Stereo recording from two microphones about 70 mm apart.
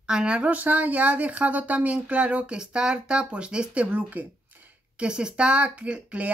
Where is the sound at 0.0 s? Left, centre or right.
Centre.